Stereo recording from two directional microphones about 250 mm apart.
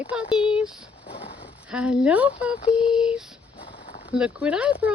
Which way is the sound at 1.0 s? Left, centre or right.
Left.